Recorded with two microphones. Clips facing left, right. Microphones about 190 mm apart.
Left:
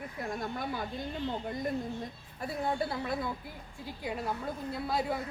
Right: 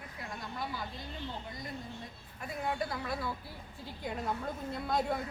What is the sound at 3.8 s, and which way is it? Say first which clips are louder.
A woman's voice: left 1 dB; 10° left (ahead or behind).